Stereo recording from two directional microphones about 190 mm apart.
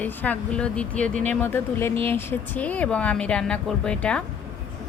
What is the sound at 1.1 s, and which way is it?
Speech, 40° right (ahead or behind).